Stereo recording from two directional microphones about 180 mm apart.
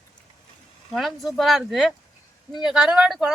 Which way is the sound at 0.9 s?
Centre (ahead or behind).